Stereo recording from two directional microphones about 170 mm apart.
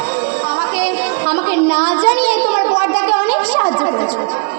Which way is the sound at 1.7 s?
30° left (ahead or behind).